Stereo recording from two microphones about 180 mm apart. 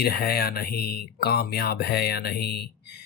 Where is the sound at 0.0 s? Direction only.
60° left (ahead or behind).